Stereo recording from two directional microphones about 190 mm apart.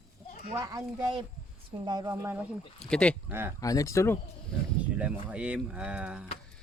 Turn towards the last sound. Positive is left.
turn(degrees=-5)  # may be behind; listen again after turning